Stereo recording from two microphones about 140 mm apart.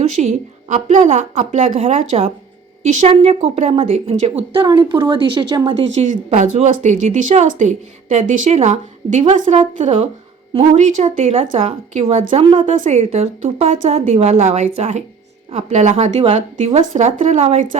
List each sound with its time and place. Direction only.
0.2 s a woman's voice: 55° right (ahead or behind); by 5.8 s 35° right (ahead or behind)
6.0 s a woman's voice: 55° right (ahead or behind)
9.3 s a woman's voice: 65° right (ahead or behind)
12.5 s a woman's voice: 65° right (ahead or behind)